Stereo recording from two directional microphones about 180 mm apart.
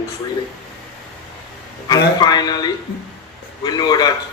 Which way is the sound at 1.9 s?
20° left (ahead or behind).